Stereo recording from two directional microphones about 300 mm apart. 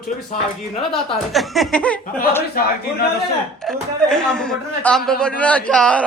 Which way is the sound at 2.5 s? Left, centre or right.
Left.